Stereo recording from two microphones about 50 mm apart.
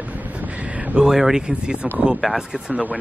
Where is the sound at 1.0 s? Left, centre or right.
Centre.